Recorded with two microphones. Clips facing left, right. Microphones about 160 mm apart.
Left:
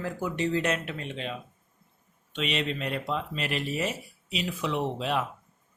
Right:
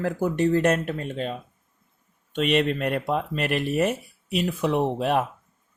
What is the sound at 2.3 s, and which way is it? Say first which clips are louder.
Speech: right 8 dB; 50° right (ahead or behind).